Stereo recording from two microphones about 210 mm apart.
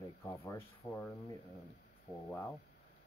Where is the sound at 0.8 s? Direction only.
10° left (ahead or behind).